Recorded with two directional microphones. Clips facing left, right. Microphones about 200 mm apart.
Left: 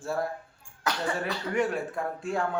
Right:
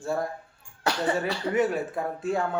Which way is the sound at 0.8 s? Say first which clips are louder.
Right 4 dB; 30° right (ahead or behind).